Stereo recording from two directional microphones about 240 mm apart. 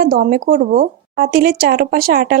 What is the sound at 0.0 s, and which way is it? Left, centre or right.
A woman's voice, right.